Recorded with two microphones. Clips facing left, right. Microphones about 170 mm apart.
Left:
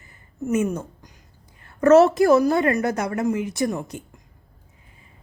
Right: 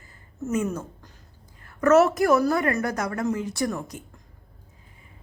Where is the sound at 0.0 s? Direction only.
20° left (ahead or behind).